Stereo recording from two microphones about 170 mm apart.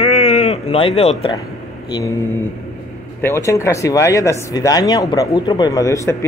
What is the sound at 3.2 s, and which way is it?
Speech, 15° left (ahead or behind).